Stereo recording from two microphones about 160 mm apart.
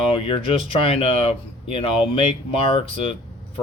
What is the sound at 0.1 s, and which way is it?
Speech, 35° left (ahead or behind).